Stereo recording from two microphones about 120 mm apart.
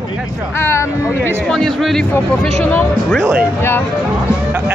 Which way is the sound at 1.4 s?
5° left (ahead or behind).